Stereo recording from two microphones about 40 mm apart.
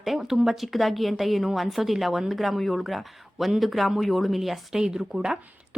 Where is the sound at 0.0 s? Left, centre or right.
Centre.